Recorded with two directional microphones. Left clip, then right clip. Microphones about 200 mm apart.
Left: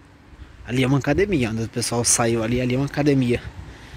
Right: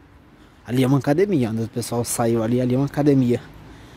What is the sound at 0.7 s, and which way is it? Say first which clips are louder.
Speech: right 1 dB; 15° right (ahead or behind).